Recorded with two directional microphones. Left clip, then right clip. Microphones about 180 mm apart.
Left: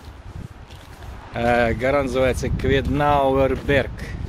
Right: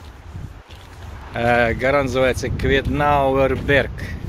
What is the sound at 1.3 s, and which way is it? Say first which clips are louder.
Speech: right 2 dB; 5° left (ahead or behind).